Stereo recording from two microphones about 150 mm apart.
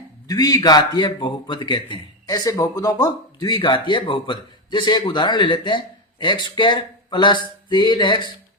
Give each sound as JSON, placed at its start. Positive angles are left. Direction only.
{"t": 0.3, "sound": "a man's voice", "side_deg": 25}